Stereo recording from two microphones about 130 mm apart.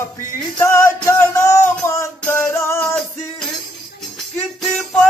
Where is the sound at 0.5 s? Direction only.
20° left (ahead or behind).